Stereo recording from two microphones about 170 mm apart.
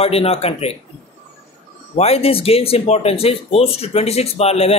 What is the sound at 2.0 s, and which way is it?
Speech, 35° left (ahead or behind).